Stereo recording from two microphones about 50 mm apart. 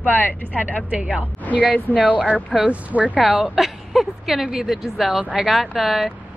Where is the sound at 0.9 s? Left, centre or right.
Right.